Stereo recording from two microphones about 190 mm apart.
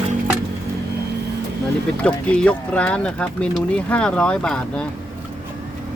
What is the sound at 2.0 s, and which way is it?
Speech, 5° left (ahead or behind).